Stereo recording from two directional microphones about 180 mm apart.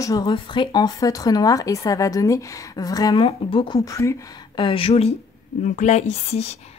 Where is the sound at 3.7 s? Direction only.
15° left (ahead or behind); by 6.7 s 40° left (ahead or behind).